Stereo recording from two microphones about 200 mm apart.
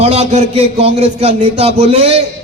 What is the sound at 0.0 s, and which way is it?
A man's voice, 30° right (ahead or behind).